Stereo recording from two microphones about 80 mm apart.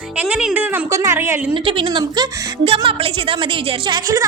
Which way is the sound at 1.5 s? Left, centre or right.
Right.